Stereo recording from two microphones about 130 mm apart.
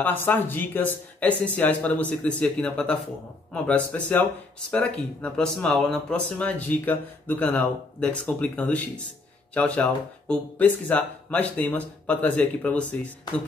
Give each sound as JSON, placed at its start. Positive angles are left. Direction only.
{"t": 0.0, "sound": "speech", "side_deg": 15}